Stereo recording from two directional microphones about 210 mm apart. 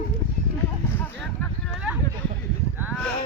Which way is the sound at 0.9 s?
10° left (ahead or behind).